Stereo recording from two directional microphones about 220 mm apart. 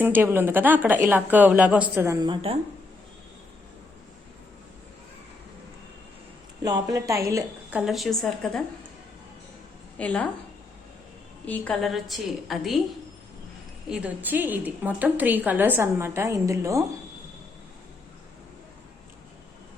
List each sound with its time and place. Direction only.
0.0 s a woman's voice: 10° right (ahead or behind); by 2.6 s 25° right (ahead or behind)
6.6 s a woman's voice: 15° right (ahead or behind); by 8.6 s centre (ahead or behind)
10.0 s a woman's voice: 5° left (ahead or behind)
11.4 s a woman's voice: 5° left (ahead or behind)
13.9 s a woman's voice: 5° right (ahead or behind)